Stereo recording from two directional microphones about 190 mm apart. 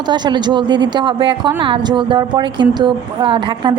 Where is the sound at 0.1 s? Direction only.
25° right (ahead or behind).